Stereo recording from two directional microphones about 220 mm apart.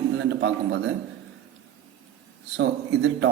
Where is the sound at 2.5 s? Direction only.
55° right (ahead or behind).